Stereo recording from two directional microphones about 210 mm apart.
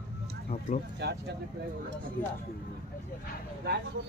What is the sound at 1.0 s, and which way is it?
Speech, 50° right (ahead or behind).